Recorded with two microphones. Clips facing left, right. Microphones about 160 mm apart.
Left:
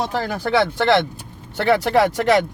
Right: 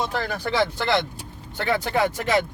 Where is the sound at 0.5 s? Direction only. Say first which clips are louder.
Left 6 dB; 65° left (ahead or behind).